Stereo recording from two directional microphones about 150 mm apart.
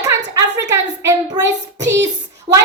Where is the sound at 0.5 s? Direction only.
20° right (ahead or behind).